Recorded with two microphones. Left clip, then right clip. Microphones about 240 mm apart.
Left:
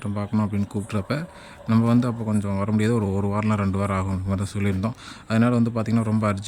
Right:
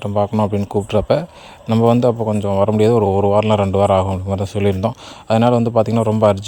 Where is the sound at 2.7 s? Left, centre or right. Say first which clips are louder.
Right 8 dB; centre.